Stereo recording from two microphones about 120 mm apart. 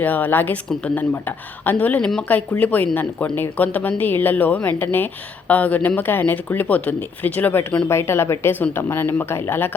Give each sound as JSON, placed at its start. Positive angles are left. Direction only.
{"t": 0.0, "sound": "speech", "side_deg": 15}
{"t": 7.9, "sound": "speech", "side_deg": 20}